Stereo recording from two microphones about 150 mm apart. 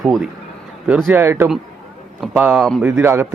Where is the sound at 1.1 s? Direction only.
15° right (ahead or behind).